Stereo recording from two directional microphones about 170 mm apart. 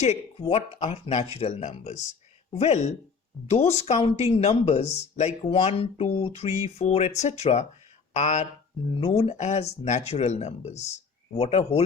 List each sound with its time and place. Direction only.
0.0 s speech: 35° left (ahead or behind)